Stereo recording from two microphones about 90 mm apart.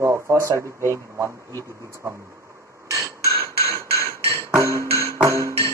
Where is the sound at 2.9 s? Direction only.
35° right (ahead or behind).